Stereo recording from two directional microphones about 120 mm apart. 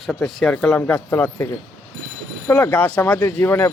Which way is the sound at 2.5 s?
15° left (ahead or behind).